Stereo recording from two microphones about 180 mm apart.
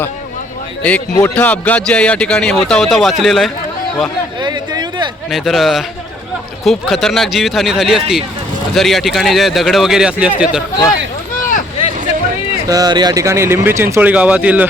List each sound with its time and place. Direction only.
0.8 s speech: 5° left (ahead or behind)
4.4 s a sound: 25° right (ahead or behind)
5.3 s speech: centre (ahead or behind)
12.6 s speech: 20° right (ahead or behind)